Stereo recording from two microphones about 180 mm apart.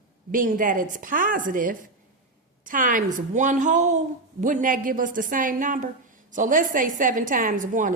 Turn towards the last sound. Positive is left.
turn(degrees=-45)  # may be behind; listen again after turning